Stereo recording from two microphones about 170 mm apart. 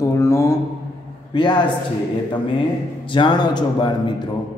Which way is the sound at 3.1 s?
25° left (ahead or behind).